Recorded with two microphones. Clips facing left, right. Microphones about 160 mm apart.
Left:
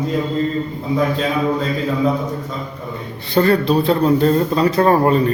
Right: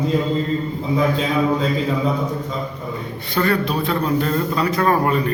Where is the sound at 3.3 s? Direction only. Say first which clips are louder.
Left 5 dB; 30° left (ahead or behind).